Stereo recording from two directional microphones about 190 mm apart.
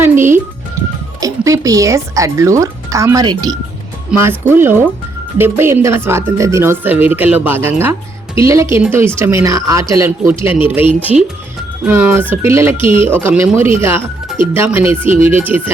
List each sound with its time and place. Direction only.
0.0 s speech: 10° right (ahead or behind)